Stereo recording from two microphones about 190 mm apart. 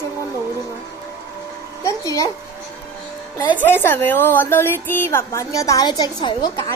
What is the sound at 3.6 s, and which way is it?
A woman's voice, 10° left (ahead or behind).